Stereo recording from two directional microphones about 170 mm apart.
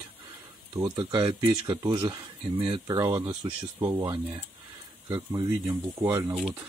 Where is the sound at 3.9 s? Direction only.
25° right (ahead or behind).